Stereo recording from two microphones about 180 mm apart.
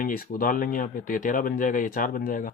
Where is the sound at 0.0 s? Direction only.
55° left (ahead or behind).